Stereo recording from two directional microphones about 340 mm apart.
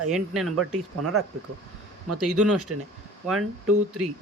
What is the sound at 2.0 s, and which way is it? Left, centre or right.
Speech, right.